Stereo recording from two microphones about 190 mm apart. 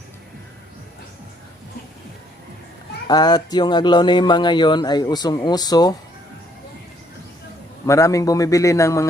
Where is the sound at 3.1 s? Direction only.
20° left (ahead or behind).